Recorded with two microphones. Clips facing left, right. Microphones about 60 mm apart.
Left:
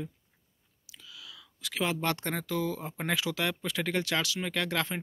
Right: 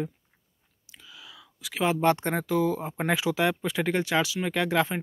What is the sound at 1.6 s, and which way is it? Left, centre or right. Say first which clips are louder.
Speech: right 7 dB; centre.